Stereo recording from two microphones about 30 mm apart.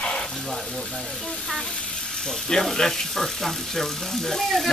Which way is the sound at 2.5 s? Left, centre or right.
Centre.